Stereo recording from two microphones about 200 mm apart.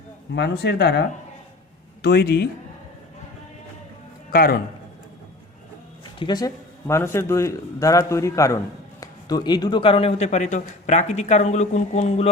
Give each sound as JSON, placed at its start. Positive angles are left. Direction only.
{"t": 0.3, "sound": "speech", "side_deg": 55}
{"t": 4.3, "sound": "speech", "side_deg": 50}
{"t": 6.1, "sound": "a man's voice", "side_deg": 20}